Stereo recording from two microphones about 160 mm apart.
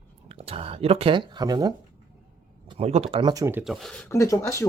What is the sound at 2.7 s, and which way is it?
Speech, 40° right (ahead or behind).